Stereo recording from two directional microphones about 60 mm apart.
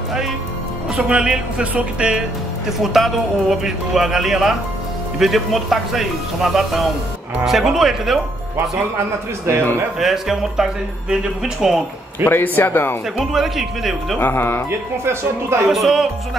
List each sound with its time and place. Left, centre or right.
0.9 s speech: centre
2.8 s speech: centre
9.5 s speech: right
9.9 s speech: centre
12.3 s a man's voice: left
13.2 s speech: centre
14.2 s a man's voice: left
14.7 s speech: right
15.7 s speech: centre